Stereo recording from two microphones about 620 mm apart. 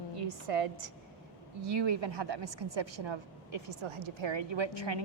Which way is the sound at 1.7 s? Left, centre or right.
Right.